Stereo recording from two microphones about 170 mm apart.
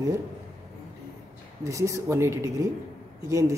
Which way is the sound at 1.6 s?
20° right (ahead or behind).